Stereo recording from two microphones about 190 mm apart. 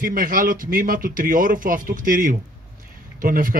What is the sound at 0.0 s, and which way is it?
Speech, 45° right (ahead or behind).